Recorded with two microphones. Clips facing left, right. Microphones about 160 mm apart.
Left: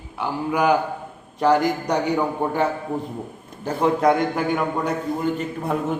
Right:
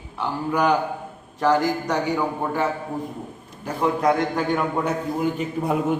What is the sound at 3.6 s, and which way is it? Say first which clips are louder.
Speech: left 2 dB; 25° left (ahead or behind).